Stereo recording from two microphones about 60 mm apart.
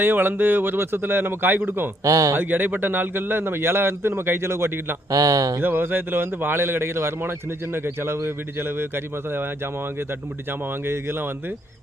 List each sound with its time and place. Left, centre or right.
0.0 s a man's voice: right
2.0 s speech: right
2.3 s a man's voice: right
5.1 s speech: right
5.5 s a man's voice: right
10.8 s a man's voice: right